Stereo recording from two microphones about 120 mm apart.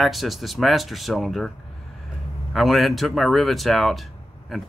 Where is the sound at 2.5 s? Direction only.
Centre (ahead or behind).